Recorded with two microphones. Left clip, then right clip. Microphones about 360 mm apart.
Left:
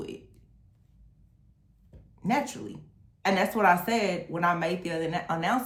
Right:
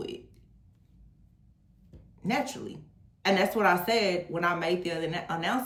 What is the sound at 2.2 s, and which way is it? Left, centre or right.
Speech, centre.